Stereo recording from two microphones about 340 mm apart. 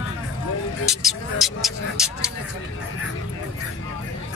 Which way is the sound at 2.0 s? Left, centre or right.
Centre.